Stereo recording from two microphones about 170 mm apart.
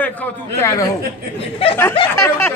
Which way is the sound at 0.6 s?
15° left (ahead or behind).